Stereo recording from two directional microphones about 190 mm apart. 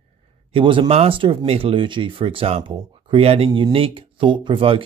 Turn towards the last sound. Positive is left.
turn(degrees=-25)  # may be behind; listen again after turning